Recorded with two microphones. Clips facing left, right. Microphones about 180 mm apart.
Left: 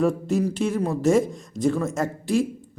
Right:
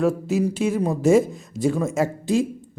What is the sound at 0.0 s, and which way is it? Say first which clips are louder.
Speech: right 1 dB; 5° right (ahead or behind).